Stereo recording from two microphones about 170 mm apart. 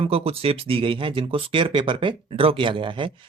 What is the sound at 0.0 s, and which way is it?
Speech, 35° right (ahead or behind).